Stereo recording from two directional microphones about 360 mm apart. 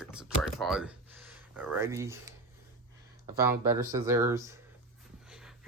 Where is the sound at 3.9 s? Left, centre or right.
Centre.